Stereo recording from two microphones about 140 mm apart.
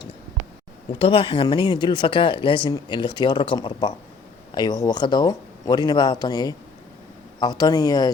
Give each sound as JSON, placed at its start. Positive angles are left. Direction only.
{"t": 0.9, "sound": "speech", "side_deg": 40}